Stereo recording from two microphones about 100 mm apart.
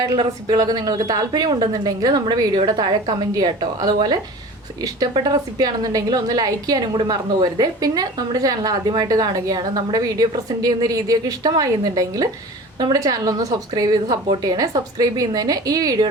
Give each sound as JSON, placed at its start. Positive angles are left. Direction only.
{"t": 0.0, "sound": "a woman's voice", "side_deg": -40}